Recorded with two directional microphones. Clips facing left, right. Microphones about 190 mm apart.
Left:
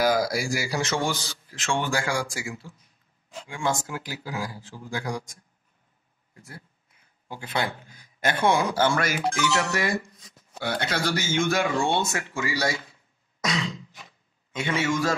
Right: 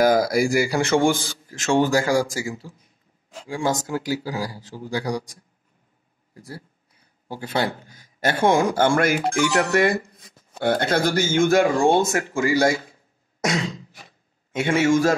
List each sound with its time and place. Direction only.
0.0 s speech: 50° right (ahead or behind)
1.5 s speech: 40° right (ahead or behind)
9.1 s speech: 15° right (ahead or behind)
9.7 s speech: 55° right (ahead or behind)
13.4 s throat clearing: 45° right (ahead or behind)
14.5 s speech: 50° right (ahead or behind)